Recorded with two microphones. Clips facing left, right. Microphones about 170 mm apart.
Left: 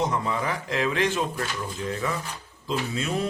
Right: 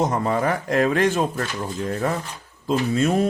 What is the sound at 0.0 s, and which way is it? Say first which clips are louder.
Speech: right 5 dB; 50° right (ahead or behind).